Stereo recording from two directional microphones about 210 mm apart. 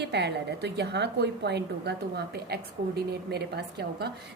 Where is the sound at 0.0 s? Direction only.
55° right (ahead or behind).